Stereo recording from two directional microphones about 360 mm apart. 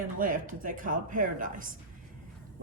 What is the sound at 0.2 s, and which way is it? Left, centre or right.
Speech, right.